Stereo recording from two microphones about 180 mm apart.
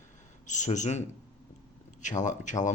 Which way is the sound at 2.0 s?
45° left (ahead or behind).